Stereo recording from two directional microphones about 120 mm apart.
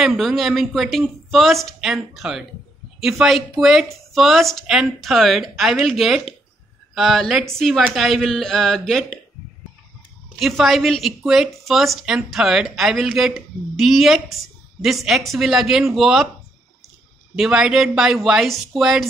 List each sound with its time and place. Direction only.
0.0 s speech: centre (ahead or behind)
10.4 s speech: centre (ahead or behind)
17.4 s speech: 5° right (ahead or behind)